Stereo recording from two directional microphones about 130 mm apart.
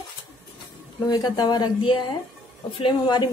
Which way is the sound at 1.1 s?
30° left (ahead or behind).